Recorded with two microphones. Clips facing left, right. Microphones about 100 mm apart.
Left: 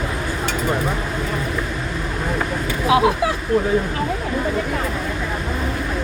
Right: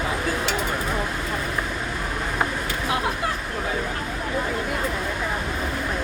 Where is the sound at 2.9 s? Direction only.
90° left.